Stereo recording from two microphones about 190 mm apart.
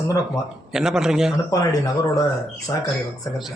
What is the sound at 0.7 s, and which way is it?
Speech, 5° right (ahead or behind).